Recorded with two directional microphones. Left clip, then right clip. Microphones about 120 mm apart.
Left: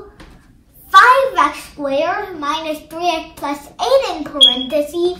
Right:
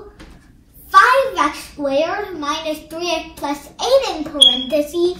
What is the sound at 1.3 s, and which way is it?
A child's voice, 20° left (ahead or behind).